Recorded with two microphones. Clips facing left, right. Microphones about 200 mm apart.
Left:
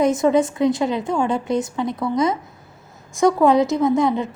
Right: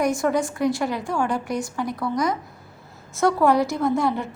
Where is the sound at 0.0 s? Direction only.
20° left (ahead or behind).